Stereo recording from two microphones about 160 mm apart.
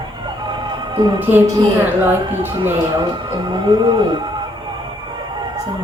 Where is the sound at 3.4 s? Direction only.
30° right (ahead or behind).